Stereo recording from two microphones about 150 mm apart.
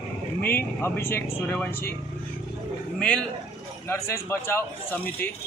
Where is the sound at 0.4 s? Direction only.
15° left (ahead or behind).